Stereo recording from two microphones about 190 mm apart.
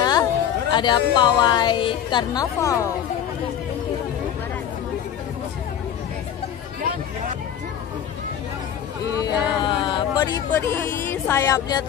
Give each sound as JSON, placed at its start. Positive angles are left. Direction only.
{"t": 0.0, "sound": "speech", "side_deg": 20}
{"t": 9.1, "sound": "a sound", "side_deg": 20}
{"t": 10.5, "sound": "speech", "side_deg": 15}